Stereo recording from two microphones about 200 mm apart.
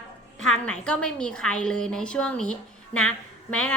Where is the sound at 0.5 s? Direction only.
5° left (ahead or behind).